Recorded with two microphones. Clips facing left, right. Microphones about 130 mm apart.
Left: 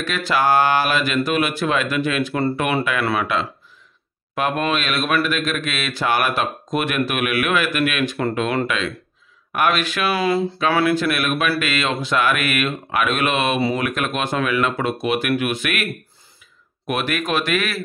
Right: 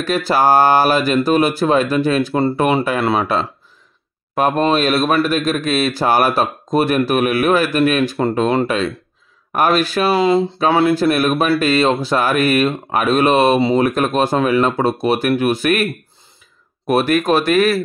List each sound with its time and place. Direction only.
0.0 s a man's voice: 40° right (ahead or behind)
3.0 s speech: 25° right (ahead or behind)
4.4 s a man's voice: 35° right (ahead or behind)
10.1 s speech: 20° right (ahead or behind)
11.0 s a man's voice: 35° right (ahead or behind)
13.6 s speech: 25° right (ahead or behind)
13.8 s a man's voice: 35° right (ahead or behind)